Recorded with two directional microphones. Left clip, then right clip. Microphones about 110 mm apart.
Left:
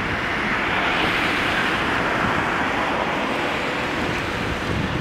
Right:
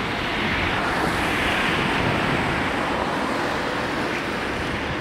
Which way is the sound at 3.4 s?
50° left (ahead or behind).